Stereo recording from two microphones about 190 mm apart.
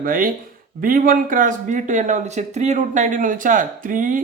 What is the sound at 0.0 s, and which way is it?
Speech, 45° right (ahead or behind).